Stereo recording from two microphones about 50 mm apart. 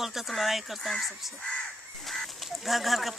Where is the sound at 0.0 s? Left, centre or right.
Centre.